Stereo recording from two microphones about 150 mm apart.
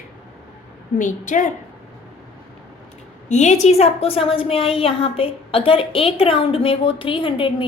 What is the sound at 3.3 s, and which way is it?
A woman's voice, 50° left (ahead or behind).